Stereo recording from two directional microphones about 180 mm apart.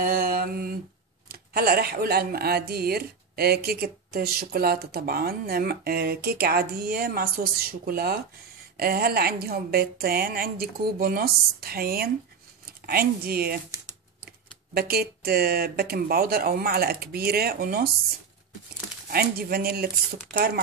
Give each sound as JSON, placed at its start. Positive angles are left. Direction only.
{"t": 0.0, "sound": "a sound", "side_deg": -55}
{"t": 1.3, "sound": "speech", "side_deg": -55}
{"t": 19.0, "sound": "speech", "side_deg": -55}